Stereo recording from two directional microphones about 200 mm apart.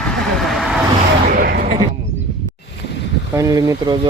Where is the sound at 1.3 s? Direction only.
50° right (ahead or behind).